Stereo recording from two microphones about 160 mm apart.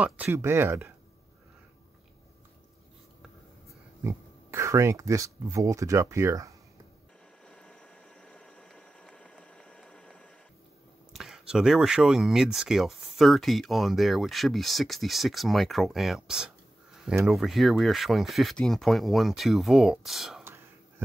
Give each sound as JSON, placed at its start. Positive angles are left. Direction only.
{"t": 0.0, "sound": "speech", "side_deg": -10}
{"t": 4.0, "sound": "speech", "side_deg": -20}
{"t": 7.4, "sound": "a sound", "side_deg": 5}
{"t": 11.1, "sound": "speech", "side_deg": 0}